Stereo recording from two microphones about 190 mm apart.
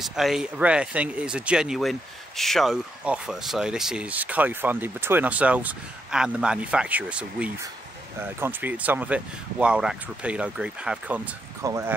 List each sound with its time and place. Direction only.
0.0 s speech: centre (ahead or behind)